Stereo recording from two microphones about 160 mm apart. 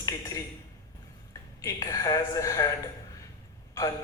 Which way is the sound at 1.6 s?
20° left (ahead or behind).